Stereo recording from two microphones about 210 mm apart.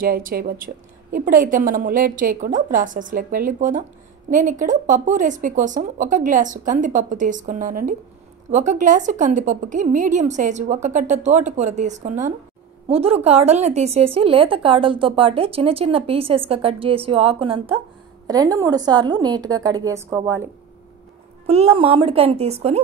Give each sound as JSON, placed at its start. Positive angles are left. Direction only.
{"t": 0.0, "sound": "a woman's voice", "side_deg": -45}
{"t": 21.5, "sound": "speech", "side_deg": -30}